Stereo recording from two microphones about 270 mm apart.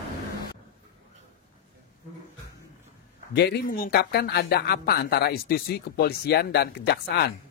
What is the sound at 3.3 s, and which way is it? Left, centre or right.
A man's voice, left.